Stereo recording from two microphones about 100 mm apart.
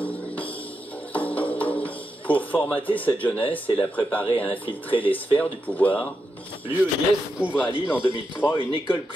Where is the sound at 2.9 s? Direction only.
15° left (ahead or behind).